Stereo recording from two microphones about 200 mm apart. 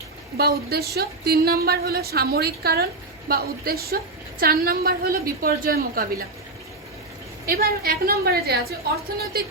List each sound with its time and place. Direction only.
0.3 s speech: 50° right (ahead or behind)
7.4 s speech: 50° right (ahead or behind)